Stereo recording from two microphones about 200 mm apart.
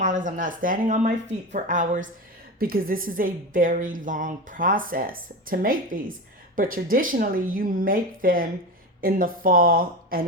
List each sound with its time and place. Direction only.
0.0 s a woman's voice: 40° right (ahead or behind)